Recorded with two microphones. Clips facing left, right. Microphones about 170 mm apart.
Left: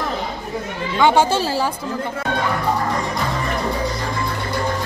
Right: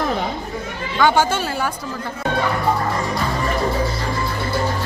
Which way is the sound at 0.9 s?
25° left (ahead or behind).